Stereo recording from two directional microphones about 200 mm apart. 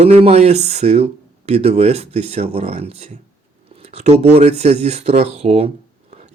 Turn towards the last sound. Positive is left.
turn(degrees=-30)  # may be behind; listen again after turning